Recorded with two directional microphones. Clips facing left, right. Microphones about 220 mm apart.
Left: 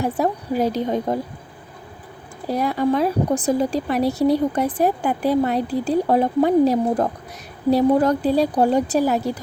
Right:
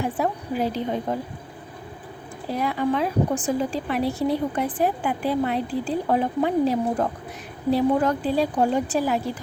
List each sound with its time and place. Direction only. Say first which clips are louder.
0.0 s a woman's voice: left 4 dB; 40° left (ahead or behind)
2.5 s a woman's voice: left 4 dB; 40° left (ahead or behind)